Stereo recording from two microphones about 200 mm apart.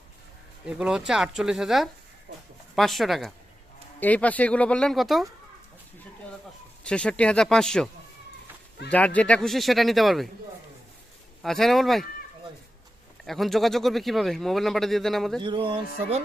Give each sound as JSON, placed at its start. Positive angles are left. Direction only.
{"t": 0.6, "sound": "speech", "side_deg": -5}
{"t": 6.8, "sound": "speech", "side_deg": 5}
{"t": 8.9, "sound": "speech", "side_deg": 5}
{"t": 11.4, "sound": "speech", "side_deg": 0}
{"t": 13.2, "sound": "speech", "side_deg": 0}
{"t": 15.4, "sound": "speech", "side_deg": -25}